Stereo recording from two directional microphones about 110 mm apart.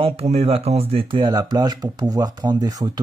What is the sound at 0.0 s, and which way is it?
Speech, 65° right (ahead or behind).